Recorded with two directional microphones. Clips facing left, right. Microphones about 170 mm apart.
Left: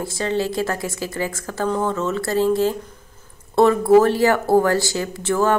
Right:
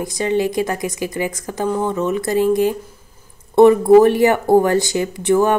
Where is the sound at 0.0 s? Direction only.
15° right (ahead or behind).